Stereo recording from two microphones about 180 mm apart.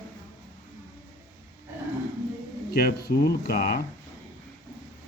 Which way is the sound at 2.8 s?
60° left (ahead or behind).